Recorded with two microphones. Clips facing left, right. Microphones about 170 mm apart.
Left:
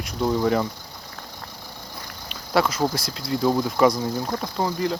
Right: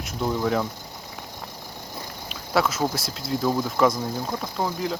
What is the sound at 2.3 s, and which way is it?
Speech, 5° right (ahead or behind).